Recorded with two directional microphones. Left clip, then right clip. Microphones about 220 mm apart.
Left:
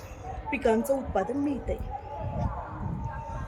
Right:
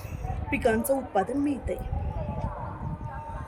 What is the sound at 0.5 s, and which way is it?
A woman's voice, 30° right (ahead or behind).